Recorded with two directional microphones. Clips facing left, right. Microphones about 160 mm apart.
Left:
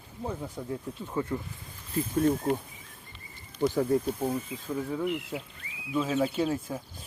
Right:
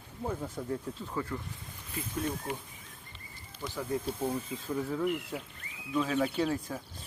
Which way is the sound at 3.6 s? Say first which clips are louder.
Left 12 dB; 50° left (ahead or behind).